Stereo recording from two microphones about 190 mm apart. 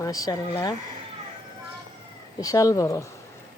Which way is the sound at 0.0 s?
20° left (ahead or behind).